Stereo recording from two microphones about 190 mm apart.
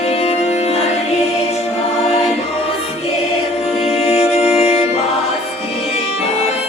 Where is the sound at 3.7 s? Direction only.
35° left (ahead or behind).